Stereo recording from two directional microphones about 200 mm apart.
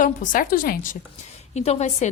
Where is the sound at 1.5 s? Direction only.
30° left (ahead or behind).